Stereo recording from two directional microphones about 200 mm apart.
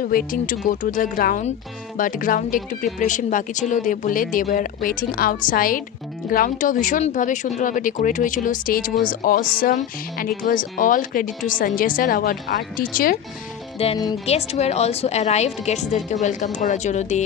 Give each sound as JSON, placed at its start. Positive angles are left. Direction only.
{"t": 0.0, "sound": "speech", "side_deg": 45}
{"t": 13.8, "sound": "speech", "side_deg": 30}